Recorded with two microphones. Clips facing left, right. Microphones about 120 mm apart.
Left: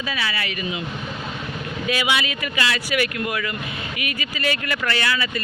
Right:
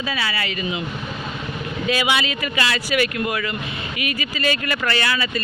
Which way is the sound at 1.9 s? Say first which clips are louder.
Right 2 dB; 30° right (ahead or behind).